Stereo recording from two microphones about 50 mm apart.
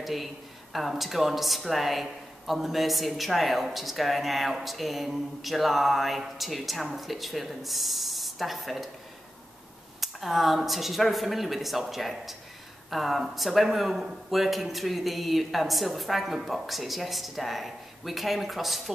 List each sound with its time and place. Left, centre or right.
0.0 s speech: centre
9.9 s speech: centre